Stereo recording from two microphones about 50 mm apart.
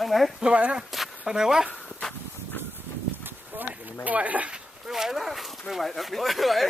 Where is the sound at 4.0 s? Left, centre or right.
Right.